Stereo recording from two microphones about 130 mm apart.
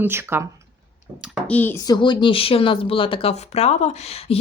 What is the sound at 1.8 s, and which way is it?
Speech, 30° left (ahead or behind).